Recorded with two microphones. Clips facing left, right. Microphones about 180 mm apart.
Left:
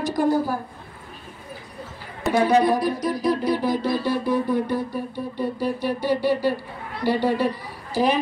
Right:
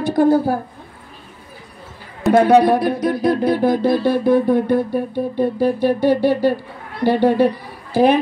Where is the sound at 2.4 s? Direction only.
60° right (ahead or behind).